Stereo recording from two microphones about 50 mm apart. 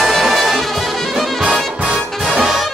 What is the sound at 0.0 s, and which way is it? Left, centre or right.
Music, centre.